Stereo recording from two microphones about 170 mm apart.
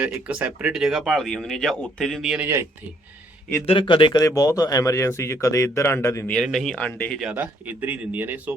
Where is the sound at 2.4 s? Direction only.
15° right (ahead or behind).